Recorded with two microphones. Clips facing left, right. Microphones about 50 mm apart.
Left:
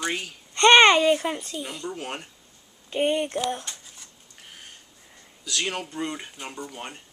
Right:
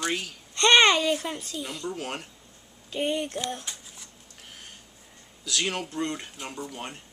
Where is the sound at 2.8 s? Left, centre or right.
Left.